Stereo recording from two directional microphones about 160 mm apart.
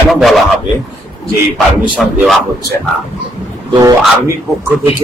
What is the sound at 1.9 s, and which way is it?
Speech, 5° right (ahead or behind).